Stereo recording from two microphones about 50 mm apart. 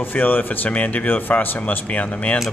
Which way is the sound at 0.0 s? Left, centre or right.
Left.